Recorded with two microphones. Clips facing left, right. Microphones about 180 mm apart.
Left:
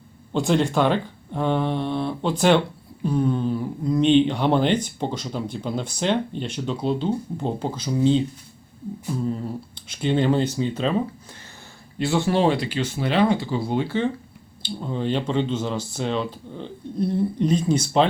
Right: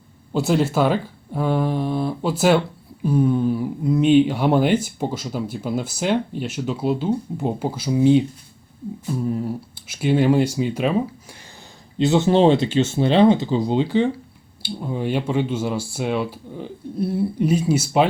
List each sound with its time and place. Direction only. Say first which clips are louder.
0.3 s speech: right 1 dB; 5° right (ahead or behind)
9.2 s speech: right 4 dB; 5° right (ahead or behind)
11.9 s speech: right 5 dB; 20° right (ahead or behind)